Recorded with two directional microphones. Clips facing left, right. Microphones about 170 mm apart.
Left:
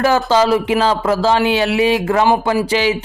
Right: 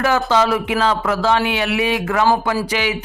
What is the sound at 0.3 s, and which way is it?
A man's voice, 30° left (ahead or behind).